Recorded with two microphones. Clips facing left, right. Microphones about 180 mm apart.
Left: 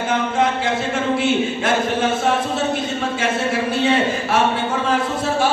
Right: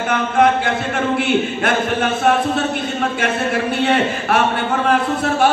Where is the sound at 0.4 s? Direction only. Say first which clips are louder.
Right 8 dB; 60° right (ahead or behind).